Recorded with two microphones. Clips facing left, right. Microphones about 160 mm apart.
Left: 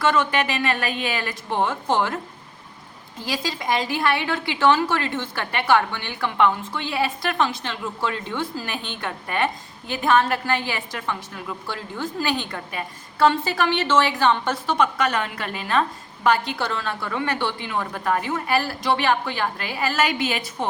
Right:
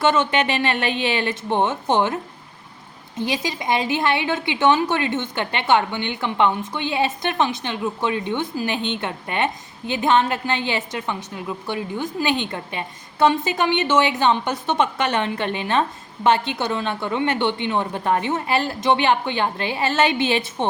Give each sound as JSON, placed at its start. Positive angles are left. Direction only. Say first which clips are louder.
{"t": 0.0, "sound": "a woman's voice", "louder": "right 2 dB", "side_deg": -25}
{"t": 3.2, "sound": "a woman's voice", "louder": "right 3 dB", "side_deg": -20}